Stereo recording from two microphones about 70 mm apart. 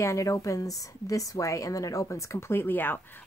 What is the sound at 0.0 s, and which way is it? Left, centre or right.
Speech, left.